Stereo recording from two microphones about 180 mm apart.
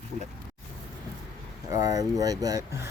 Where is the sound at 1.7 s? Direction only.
20° right (ahead or behind).